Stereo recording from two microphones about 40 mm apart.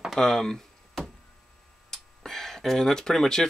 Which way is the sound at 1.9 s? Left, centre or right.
Centre.